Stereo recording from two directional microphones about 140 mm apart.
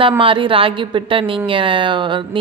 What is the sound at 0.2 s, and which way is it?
Speech, 40° right (ahead or behind).